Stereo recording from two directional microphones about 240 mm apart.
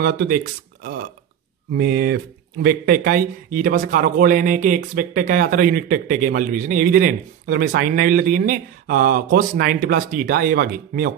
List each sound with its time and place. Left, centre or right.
0.0 s a man's voice: right
1.8 s a man's voice: right